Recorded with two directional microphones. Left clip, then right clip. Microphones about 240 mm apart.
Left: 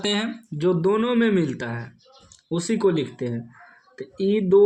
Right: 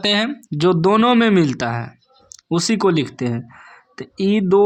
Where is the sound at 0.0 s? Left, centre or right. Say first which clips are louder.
Right 7 dB; centre.